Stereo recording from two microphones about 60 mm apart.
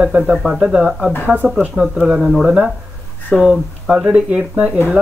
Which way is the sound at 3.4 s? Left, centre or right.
Centre.